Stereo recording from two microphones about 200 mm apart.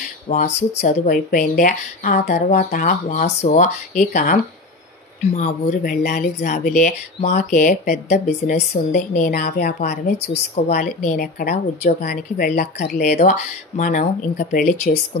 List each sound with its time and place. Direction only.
0.5 s speech: 60° left (ahead or behind)
0.8 s speech: 45° left (ahead or behind)
10.5 s speech: 35° left (ahead or behind)
12.1 s speech: 55° left (ahead or behind)
13.0 s speech: 35° left (ahead or behind)